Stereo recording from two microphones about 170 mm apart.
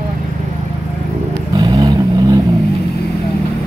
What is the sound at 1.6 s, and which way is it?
Vehicle, 25° right (ahead or behind).